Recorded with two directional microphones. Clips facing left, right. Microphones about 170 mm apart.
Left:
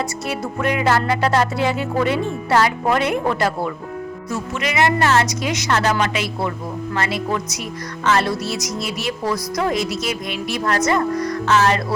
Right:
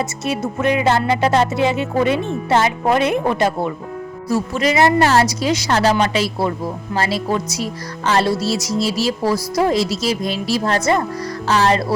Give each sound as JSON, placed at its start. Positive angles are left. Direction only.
{"t": 0.3, "sound": "music", "side_deg": -20}
{"t": 4.3, "sound": "speech", "side_deg": -35}